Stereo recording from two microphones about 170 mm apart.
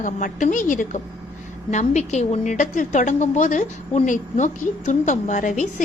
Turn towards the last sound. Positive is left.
turn(degrees=45)  # may be behind; listen again after turning